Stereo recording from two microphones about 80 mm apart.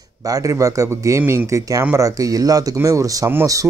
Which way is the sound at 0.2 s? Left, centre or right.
Right.